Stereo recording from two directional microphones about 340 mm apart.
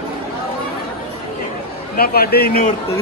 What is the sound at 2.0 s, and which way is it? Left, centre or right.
Speech, left.